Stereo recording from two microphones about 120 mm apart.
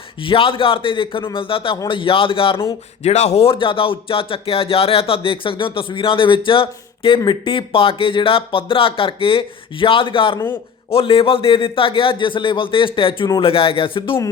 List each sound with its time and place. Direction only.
0.3 s speech: 50° left (ahead or behind)
3.0 s speech: 65° left (ahead or behind); by 10.3 s 45° left (ahead or behind)
10.3 s a man's voice: 20° left (ahead or behind)
10.9 s speech: 50° left (ahead or behind)